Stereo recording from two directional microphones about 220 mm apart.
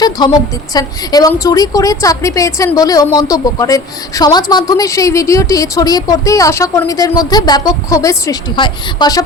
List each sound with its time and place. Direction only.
0.7 s a woman's voice: 15° left (ahead or behind)